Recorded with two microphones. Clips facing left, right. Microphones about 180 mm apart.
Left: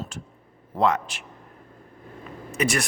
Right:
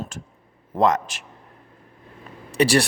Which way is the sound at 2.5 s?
35° right (ahead or behind).